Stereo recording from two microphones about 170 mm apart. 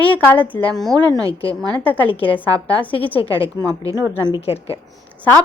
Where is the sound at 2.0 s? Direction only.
30° left (ahead or behind).